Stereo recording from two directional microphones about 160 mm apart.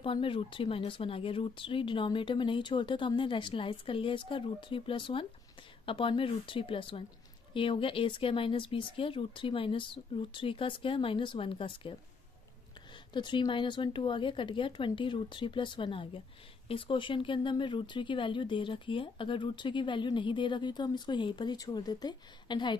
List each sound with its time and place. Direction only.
0.0 s speech: 35° left (ahead or behind)
13.1 s speech: 30° left (ahead or behind)